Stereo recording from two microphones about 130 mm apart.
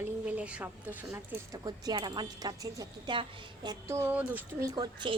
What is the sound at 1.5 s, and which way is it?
Speech, 30° right (ahead or behind).